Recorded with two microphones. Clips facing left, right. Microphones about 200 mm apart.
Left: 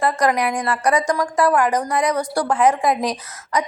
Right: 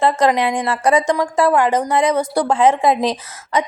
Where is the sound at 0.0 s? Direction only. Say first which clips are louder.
Right 3 dB; 25° right (ahead or behind).